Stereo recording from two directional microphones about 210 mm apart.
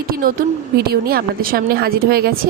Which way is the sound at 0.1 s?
45° right (ahead or behind).